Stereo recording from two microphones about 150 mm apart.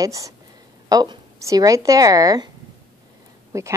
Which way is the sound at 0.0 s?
20° right (ahead or behind).